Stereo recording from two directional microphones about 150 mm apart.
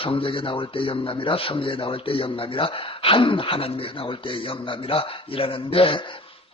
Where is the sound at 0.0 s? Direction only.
35° left (ahead or behind).